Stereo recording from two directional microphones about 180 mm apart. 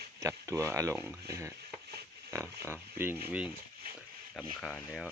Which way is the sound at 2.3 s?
15° right (ahead or behind).